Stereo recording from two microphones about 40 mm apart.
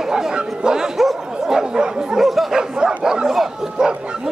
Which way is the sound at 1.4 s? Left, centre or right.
Centre.